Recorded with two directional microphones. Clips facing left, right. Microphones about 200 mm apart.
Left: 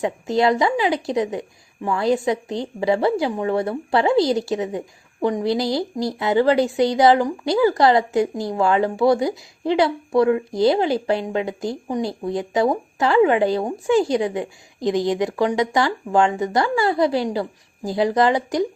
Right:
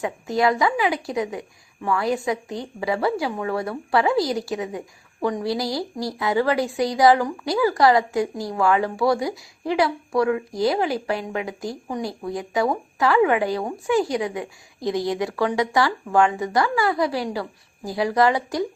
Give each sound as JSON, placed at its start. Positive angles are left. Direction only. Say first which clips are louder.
{"t": 0.0, "sound": "a woman's voice", "louder": "left 2 dB", "side_deg": 25}